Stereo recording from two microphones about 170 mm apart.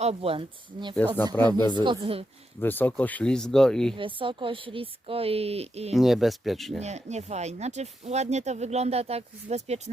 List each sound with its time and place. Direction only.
0.0 s speech: 35° right (ahead or behind)
0.9 s speech: 10° left (ahead or behind)
1.8 s speech: 30° right (ahead or behind)
2.6 s speech: 10° left (ahead or behind)
3.9 s speech: 30° right (ahead or behind)
5.9 s speech: centre (ahead or behind)
6.8 s speech: 40° right (ahead or behind)